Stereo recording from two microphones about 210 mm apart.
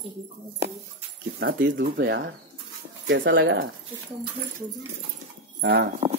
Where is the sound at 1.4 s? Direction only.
60° right (ahead or behind).